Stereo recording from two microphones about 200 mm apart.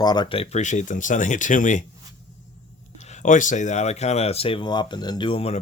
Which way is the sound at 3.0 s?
35° left (ahead or behind).